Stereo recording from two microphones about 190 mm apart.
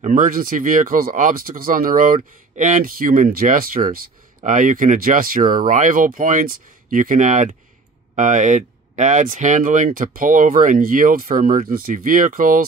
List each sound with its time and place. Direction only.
0.0 s speech: 45° right (ahead or behind)